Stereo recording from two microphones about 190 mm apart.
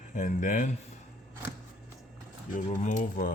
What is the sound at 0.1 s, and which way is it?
Speech, 40° left (ahead or behind).